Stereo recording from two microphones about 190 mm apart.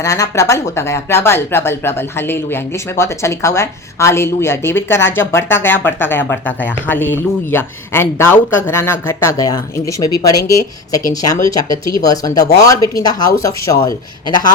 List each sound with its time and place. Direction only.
0.0 s speech: 15° left (ahead or behind)